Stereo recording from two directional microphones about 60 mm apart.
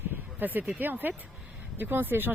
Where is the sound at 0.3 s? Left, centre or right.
Right.